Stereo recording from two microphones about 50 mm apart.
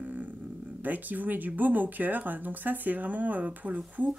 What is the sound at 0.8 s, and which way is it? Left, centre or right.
Speech, right.